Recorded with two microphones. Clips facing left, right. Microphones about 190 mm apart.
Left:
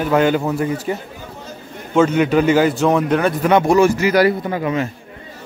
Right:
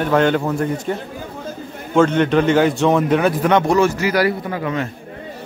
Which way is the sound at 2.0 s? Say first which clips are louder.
Even; 5° left (ahead or behind).